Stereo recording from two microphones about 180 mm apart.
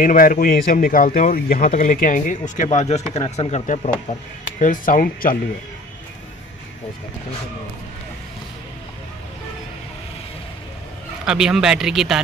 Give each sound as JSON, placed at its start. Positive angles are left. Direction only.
{"t": 0.0, "sound": "speech", "side_deg": 50}
{"t": 11.2, "sound": "speech", "side_deg": -5}